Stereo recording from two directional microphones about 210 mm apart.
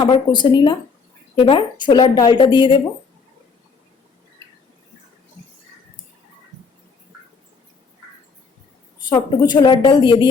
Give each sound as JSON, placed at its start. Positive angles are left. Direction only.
{"t": 0.0, "sound": "a woman's voice", "side_deg": 20}
{"t": 9.0, "sound": "a woman's voice", "side_deg": 20}